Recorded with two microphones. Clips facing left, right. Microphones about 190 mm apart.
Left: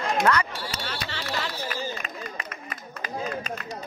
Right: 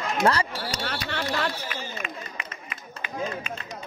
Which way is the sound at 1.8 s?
40° left (ahead or behind).